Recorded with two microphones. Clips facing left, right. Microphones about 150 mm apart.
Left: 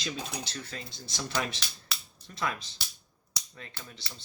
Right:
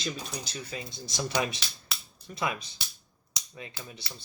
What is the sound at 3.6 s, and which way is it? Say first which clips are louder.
Speech: right 4 dB; 15° right (ahead or behind).